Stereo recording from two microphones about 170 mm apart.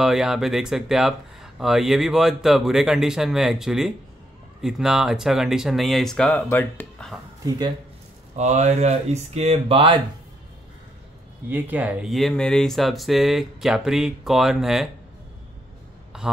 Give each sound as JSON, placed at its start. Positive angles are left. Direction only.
{"t": 0.0, "sound": "speech", "side_deg": -5}
{"t": 7.4, "sound": "speech", "side_deg": -25}
{"t": 8.4, "sound": "speech", "side_deg": -40}
{"t": 11.4, "sound": "speech", "side_deg": -10}
{"t": 16.1, "sound": "a sound", "side_deg": -5}